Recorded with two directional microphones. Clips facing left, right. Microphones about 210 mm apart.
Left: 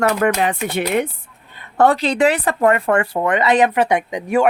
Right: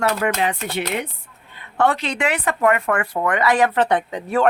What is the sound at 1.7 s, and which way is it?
Speech, 40° left (ahead or behind).